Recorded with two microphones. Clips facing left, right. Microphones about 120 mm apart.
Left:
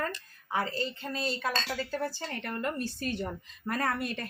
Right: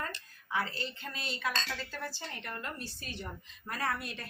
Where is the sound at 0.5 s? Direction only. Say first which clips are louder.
Left 4 dB; 40° left (ahead or behind).